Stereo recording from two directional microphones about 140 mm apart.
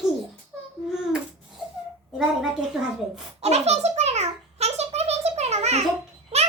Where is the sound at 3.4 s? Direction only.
50° right (ahead or behind).